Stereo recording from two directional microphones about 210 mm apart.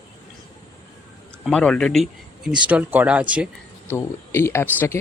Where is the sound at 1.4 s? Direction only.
5° left (ahead or behind).